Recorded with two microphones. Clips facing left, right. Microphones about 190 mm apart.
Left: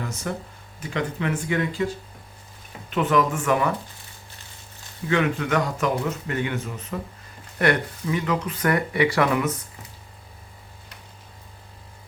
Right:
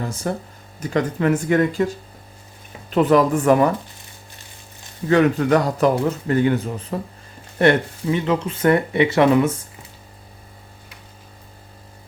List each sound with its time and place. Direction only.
0.0 s speech: 35° right (ahead or behind)
2.9 s speech: 35° right (ahead or behind)
5.0 s speech: 40° right (ahead or behind)